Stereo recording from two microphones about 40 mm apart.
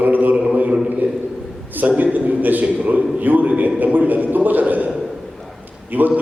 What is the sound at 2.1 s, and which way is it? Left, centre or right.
A man's voice, right.